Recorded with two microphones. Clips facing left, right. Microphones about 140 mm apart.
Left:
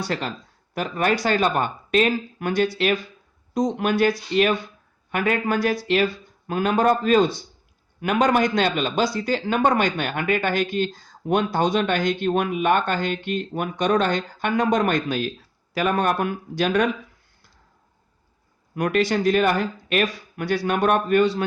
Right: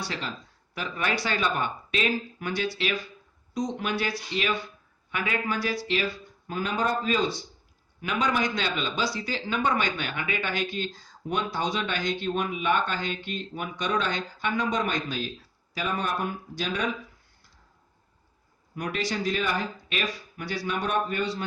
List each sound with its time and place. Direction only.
0.0 s a man's voice: 50° left (ahead or behind)
18.7 s speech: 60° left (ahead or behind)